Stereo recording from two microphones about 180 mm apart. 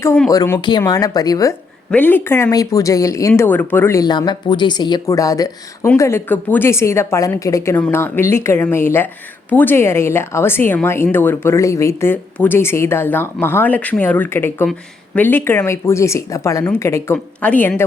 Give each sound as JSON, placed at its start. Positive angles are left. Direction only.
{"t": 0.0, "sound": "a woman's voice", "side_deg": 15}